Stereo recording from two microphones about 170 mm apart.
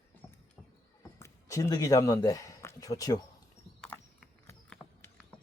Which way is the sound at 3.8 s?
10° left (ahead or behind).